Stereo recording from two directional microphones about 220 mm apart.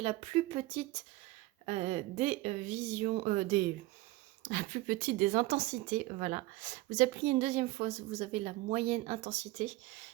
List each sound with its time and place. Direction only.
0.0 s a woman's voice: 25° right (ahead or behind)